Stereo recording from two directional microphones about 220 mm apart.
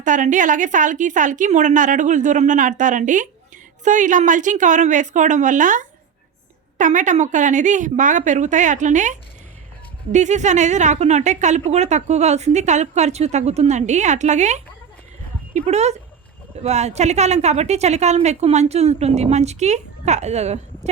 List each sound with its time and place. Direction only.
0.0 s a woman's voice: 35° right (ahead or behind)